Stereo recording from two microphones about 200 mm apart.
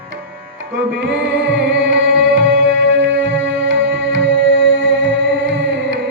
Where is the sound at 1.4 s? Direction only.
65° right (ahead or behind).